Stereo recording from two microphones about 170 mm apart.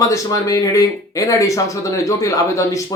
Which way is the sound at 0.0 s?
20° left (ahead or behind).